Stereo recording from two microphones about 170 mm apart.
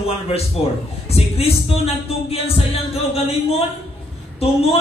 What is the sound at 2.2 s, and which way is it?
A man's voice, 35° left (ahead or behind).